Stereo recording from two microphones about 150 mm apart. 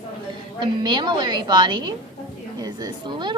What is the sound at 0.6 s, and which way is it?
A woman's voice, 30° right (ahead or behind).